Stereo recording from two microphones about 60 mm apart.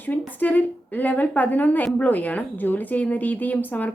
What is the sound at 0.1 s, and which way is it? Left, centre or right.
A woman's voice, left.